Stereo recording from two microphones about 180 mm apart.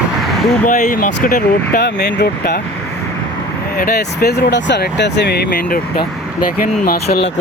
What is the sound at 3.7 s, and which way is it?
Speech, 55° left (ahead or behind).